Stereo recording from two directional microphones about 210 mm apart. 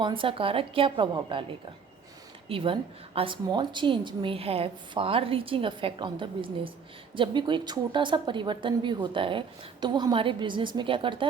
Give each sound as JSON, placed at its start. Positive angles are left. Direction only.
{"t": 0.0, "sound": "a woman's voice", "side_deg": -25}
{"t": 2.5, "sound": "a woman's voice", "side_deg": -25}